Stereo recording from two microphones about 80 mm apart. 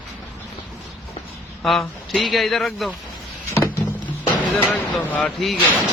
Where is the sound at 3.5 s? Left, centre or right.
Left.